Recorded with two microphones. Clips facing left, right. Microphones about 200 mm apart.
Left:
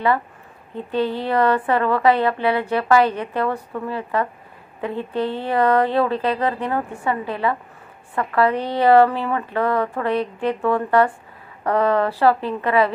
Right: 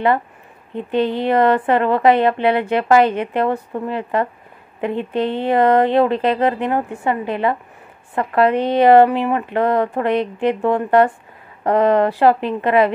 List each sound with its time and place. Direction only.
0.7 s a woman's voice: 20° right (ahead or behind)